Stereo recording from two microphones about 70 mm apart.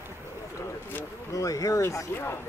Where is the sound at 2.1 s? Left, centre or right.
Left.